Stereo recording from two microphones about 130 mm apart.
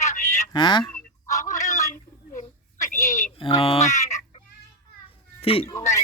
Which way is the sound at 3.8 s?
65° left (ahead or behind).